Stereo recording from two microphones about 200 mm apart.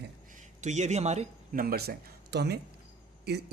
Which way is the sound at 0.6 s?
35° right (ahead or behind).